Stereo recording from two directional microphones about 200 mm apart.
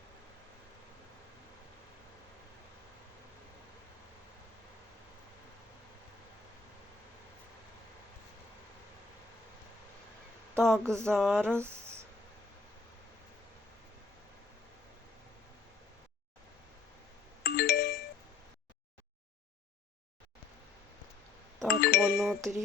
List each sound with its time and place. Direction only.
10.6 s a sound: 5° left (ahead or behind)
11.5 s speech: 15° right (ahead or behind)
17.4 s music: 50° left (ahead or behind)
21.7 s music: 50° left (ahead or behind)
22.4 s music: 15° right (ahead or behind)